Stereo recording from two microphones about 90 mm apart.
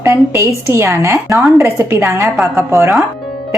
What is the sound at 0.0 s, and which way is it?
A woman's voice, 30° right (ahead or behind).